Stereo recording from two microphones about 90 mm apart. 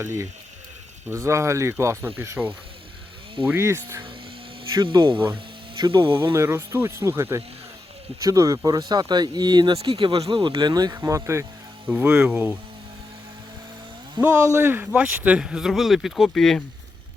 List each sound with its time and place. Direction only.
0.0 s speech: 30° right (ahead or behind)
3.5 s speech: 30° right (ahead or behind)
4.8 s speech: 65° right (ahead or behind)
6.3 s speech: 30° right (ahead or behind)
8.2 s speech: 40° right (ahead or behind)
9.7 s speech: 75° right (ahead or behind)
10.6 s speech: 50° right (ahead or behind)
10.9 s speech: 30° right (ahead or behind)
11.9 s speech: 15° right (ahead or behind)
14.4 s speech: 30° right (ahead or behind)
14.9 s speech: 15° right (ahead or behind); by 16.6 s 5° left (ahead or behind)